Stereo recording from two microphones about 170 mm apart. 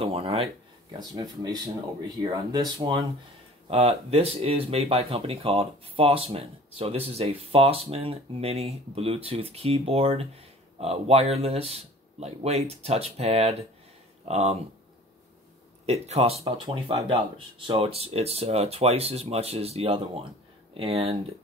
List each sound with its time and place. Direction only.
0.0 s speech: 35° right (ahead or behind)
0.9 s speech: 25° right (ahead or behind)
15.8 s speech: 40° right (ahead or behind)